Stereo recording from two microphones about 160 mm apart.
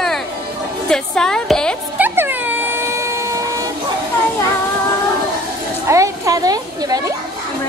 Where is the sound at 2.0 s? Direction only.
10° right (ahead or behind).